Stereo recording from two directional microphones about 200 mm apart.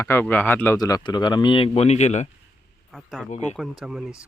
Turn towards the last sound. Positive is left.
turn(degrees=-5)  # may be behind; listen again after turning